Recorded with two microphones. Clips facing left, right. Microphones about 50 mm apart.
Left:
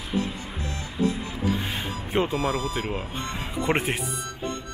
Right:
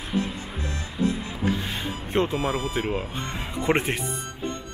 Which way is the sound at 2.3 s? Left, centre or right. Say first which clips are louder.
Even; right.